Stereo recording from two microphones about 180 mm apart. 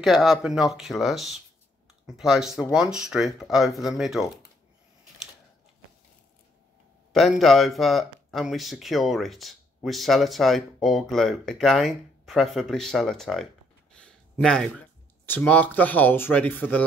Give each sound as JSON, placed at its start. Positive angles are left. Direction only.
{"t": 0.0, "sound": "speech", "side_deg": 0}
{"t": 7.1, "sound": "speech", "side_deg": 0}